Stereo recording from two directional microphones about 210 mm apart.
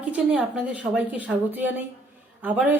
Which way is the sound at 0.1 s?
5° right (ahead or behind).